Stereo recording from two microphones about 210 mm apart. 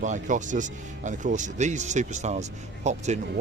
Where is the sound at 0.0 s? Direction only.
35° right (ahead or behind).